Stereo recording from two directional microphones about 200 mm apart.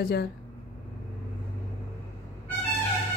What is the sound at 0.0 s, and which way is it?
Speech, 50° left (ahead or behind).